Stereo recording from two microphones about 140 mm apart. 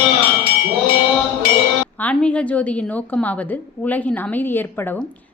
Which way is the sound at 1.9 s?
10° left (ahead or behind).